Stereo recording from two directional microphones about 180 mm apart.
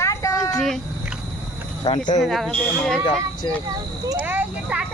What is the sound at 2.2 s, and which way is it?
Speech, centre (ahead or behind).